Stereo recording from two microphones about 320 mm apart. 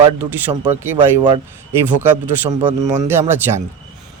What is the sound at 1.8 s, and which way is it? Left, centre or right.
Speech, centre.